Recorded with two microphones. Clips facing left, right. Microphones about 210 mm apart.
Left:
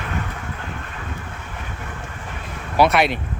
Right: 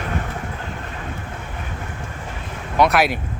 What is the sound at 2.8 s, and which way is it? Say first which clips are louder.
Speech: even; centre (ahead or behind).